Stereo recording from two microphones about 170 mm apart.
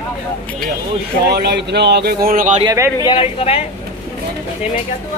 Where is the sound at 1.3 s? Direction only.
75° right (ahead or behind); by 2.6 s 50° right (ahead or behind).